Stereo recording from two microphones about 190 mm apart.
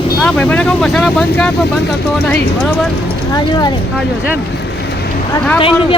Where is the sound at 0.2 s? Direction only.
5° left (ahead or behind).